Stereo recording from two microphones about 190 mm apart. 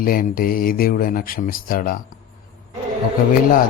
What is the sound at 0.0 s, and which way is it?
Speech, 50° left (ahead or behind).